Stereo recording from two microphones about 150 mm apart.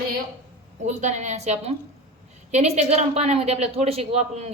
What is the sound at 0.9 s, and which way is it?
A woman's voice, 50° right (ahead or behind).